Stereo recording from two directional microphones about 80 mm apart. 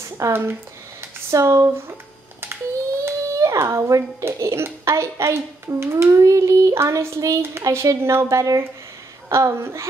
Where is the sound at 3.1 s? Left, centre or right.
Right.